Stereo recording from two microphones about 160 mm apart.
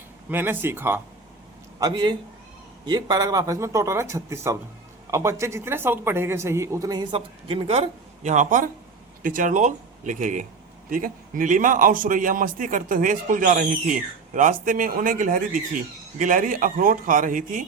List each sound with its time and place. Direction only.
0.3 s speech: 10° right (ahead or behind)
1.8 s a man's voice: 25° right (ahead or behind); by 17.6 s 55° right (ahead or behind)